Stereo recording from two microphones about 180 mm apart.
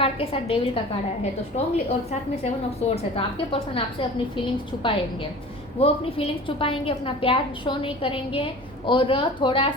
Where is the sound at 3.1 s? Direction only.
30° left (ahead or behind).